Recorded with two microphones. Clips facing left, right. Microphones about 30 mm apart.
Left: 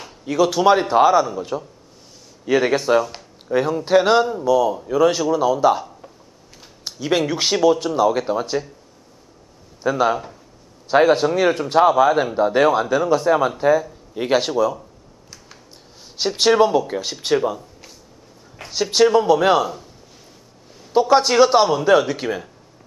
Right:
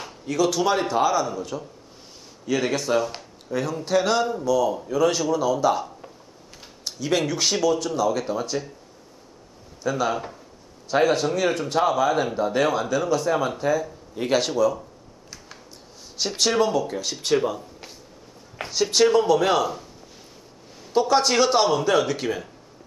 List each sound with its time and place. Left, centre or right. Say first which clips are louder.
0.2 s a man's voice: left 5 dB; centre
3.0 s speech: left 3 dB; centre
3.4 s a man's voice: left 7 dB; left
4.3 s a man's voice: left 4 dB; centre
9.8 s a man's voice: left 5 dB; left
16.3 s a man's voice: left 6 dB; centre
17.4 s a sound: left 3 dB; centre
18.7 s a man's voice: left 3 dB; centre
20.9 s a man's voice: left 4 dB; centre